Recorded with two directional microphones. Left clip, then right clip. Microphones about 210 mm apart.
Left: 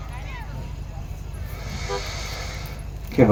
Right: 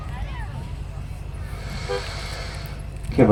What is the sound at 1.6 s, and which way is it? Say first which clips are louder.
Vehicle: right 1 dB; 25° left (ahead or behind).